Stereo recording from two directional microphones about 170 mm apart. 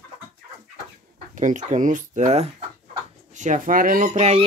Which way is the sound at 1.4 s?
45° right (ahead or behind).